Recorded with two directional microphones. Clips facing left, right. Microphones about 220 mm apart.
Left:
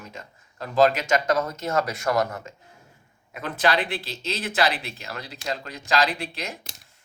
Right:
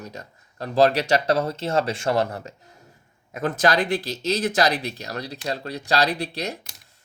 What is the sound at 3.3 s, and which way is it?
Speech, 45° right (ahead or behind).